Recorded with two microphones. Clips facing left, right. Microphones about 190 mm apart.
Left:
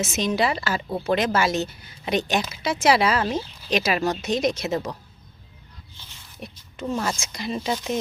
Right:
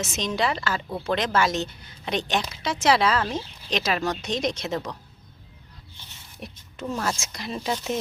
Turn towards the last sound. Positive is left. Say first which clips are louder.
# left 2 dB
turn(degrees=0)  # may be behind; listen again after turning